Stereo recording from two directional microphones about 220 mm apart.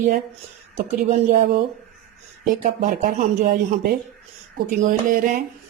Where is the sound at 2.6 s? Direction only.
40° right (ahead or behind).